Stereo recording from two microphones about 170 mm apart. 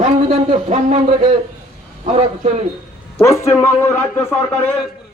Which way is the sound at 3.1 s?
15° left (ahead or behind).